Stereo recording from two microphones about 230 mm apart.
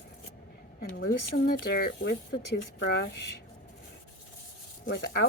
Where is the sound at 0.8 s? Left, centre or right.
Left.